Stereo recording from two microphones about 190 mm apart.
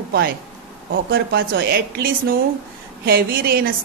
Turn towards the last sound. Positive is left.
turn(degrees=-50)  # may be behind; listen again after turning